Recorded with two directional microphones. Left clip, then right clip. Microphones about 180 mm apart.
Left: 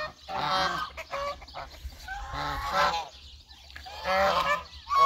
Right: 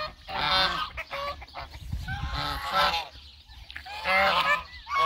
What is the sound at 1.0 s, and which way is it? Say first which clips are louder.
Fowl: even; 10° right (ahead or behind).